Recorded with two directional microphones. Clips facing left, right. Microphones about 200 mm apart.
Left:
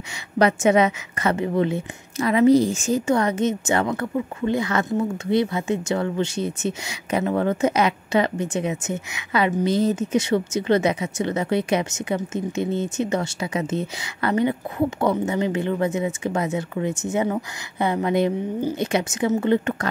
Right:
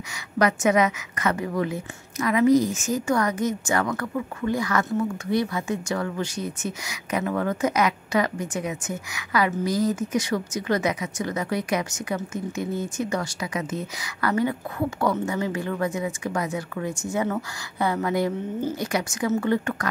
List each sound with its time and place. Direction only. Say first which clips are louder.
0.4 s a woman's voice: left 3 dB; 30° left (ahead or behind)